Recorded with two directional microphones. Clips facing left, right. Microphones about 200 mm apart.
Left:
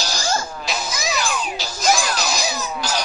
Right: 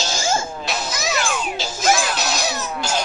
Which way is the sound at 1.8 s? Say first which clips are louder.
Even; 5° right (ahead or behind).